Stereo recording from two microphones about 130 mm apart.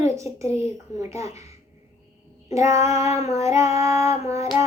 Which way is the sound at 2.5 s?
25° right (ahead or behind).